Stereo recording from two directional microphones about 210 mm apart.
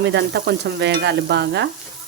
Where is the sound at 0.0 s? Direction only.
55° right (ahead or behind).